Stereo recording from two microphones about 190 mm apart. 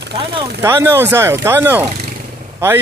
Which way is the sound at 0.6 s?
15° right (ahead or behind).